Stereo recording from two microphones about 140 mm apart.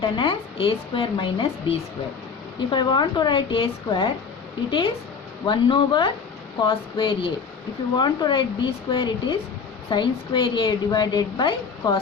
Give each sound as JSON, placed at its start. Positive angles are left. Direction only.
{"t": 0.0, "sound": "a woman's voice", "side_deg": 40}
{"t": 5.5, "sound": "a woman's voice", "side_deg": 35}